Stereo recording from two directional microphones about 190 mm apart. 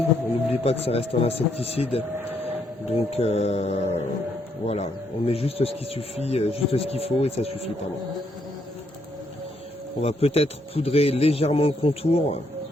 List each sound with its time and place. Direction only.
0.6 s speech: 30° left (ahead or behind)
2.2 s a sound: 10° right (ahead or behind)
2.8 s speech: 35° left (ahead or behind)
10.0 s speech: 30° left (ahead or behind)